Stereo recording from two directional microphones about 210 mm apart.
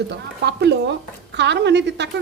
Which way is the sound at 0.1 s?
55° right (ahead or behind).